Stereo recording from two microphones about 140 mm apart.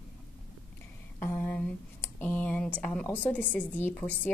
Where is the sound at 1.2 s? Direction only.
15° left (ahead or behind).